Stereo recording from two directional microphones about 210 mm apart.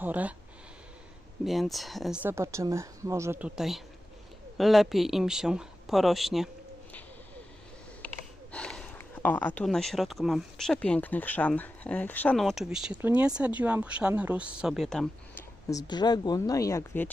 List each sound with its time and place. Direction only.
0.0 s speech: 10° right (ahead or behind)
1.5 s speech: centre (ahead or behind)
2.3 s speech: 15° right (ahead or behind)
8.5 s speech: 5° left (ahead or behind)
15.7 s speech: 20° left (ahead or behind)